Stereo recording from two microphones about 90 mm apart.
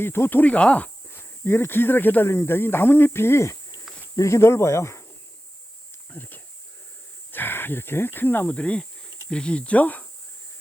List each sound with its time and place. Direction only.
0.0 s speech: 25° left (ahead or behind)
6.1 s speech: 20° left (ahead or behind)